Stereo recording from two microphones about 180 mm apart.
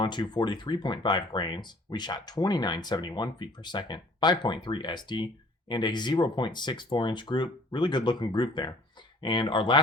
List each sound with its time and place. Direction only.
0.0 s speech: 25° left (ahead or behind)